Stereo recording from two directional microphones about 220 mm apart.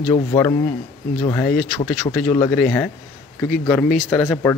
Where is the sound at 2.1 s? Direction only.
25° left (ahead or behind).